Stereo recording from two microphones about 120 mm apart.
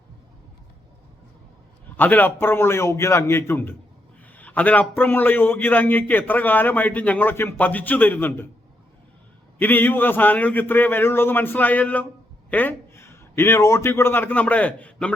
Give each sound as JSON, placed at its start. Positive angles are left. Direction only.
{"t": 2.0, "sound": "a man's voice", "side_deg": 15}
{"t": 9.6, "sound": "a man's voice", "side_deg": 15}